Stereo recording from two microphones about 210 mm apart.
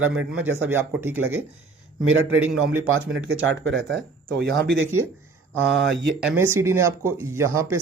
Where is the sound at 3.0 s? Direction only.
65° right (ahead or behind).